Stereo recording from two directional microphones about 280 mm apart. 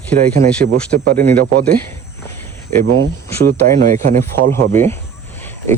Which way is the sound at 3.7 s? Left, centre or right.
Right.